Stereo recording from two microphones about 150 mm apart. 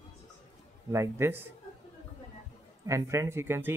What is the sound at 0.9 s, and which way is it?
Speech, 15° right (ahead or behind).